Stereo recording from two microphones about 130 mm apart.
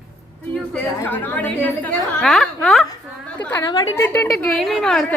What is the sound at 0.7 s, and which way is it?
A woman's voice, 15° left (ahead or behind).